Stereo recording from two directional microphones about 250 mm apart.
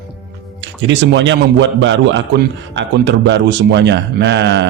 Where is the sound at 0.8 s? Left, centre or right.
Right.